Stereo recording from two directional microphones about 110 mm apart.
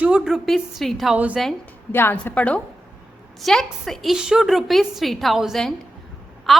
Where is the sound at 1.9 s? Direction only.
20° left (ahead or behind).